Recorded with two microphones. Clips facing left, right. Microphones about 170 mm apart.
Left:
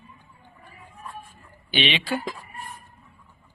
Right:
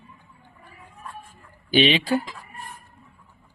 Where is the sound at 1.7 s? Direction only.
35° right (ahead or behind).